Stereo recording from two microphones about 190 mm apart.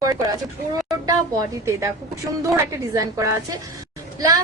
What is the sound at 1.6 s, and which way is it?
A woman's voice, 15° right (ahead or behind).